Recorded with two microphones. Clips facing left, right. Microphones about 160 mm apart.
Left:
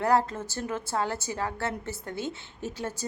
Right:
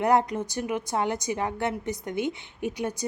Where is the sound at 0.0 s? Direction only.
20° right (ahead or behind).